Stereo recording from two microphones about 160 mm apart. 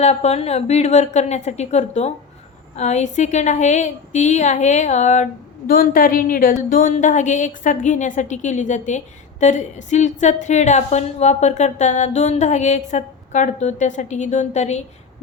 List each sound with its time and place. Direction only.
0.0 s a woman's voice: 45° left (ahead or behind)